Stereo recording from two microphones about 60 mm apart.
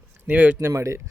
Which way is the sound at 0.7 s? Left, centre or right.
Right.